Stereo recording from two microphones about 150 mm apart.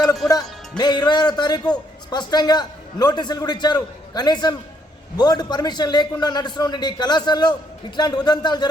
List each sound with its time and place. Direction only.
0.8 s a man's voice: 30° left (ahead or behind)